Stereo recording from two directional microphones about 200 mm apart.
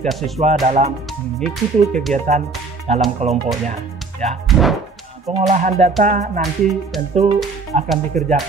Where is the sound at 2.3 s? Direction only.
35° right (ahead or behind).